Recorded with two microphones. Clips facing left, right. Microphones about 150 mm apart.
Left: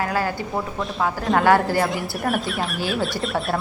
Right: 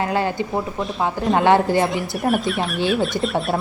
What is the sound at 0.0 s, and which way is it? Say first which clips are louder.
A woman's voice: right 3 dB; 25° right (ahead or behind).